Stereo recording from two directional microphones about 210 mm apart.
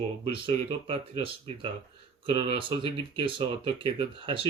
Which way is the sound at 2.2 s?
25° right (ahead or behind).